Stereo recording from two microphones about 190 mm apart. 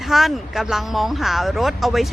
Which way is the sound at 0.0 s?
Centre (ahead or behind).